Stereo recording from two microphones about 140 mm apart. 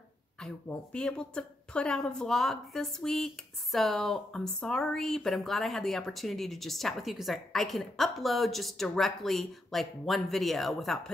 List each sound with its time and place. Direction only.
0.4 s speech: 5° left (ahead or behind)